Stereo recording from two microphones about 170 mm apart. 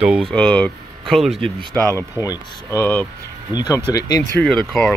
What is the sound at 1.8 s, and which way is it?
Speech, 15° left (ahead or behind).